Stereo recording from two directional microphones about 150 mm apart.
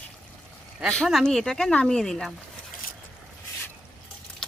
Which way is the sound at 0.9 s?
Centre (ahead or behind).